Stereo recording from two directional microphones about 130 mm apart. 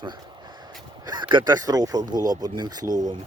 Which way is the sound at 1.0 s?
35° right (ahead or behind).